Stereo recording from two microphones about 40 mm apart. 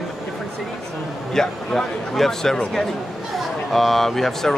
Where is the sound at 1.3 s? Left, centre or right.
Centre.